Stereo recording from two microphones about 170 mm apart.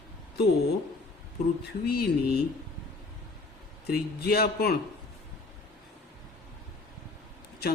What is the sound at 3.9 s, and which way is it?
Speech, 65° left (ahead or behind).